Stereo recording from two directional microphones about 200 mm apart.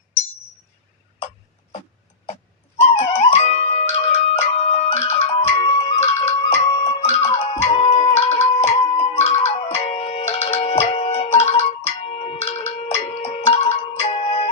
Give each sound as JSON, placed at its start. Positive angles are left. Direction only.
{"t": 2.7, "sound": "music", "side_deg": 30}